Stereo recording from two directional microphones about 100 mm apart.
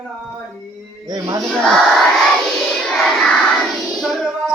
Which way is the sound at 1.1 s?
40° right (ahead or behind).